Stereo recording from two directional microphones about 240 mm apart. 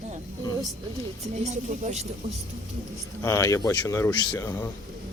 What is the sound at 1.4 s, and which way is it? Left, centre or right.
Speech, right.